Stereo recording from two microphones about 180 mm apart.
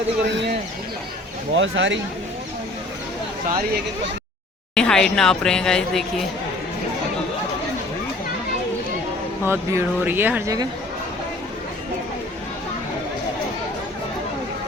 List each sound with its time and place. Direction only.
1.5 s speech: 90° right
4.7 s speech: 5° left (ahead or behind)
9.4 s speech: 10° right (ahead or behind)